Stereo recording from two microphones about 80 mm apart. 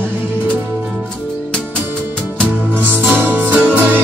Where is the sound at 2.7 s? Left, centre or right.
Right.